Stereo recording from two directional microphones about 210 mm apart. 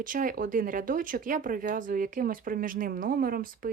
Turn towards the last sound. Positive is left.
turn(degrees=-40)  # may be behind; listen again after turning